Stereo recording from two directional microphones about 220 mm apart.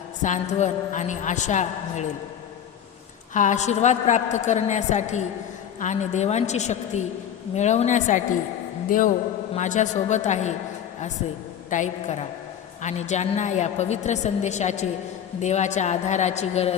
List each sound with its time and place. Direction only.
0.2 s a woman's voice: 35° left (ahead or behind)
3.3 s a woman's voice: 35° left (ahead or behind)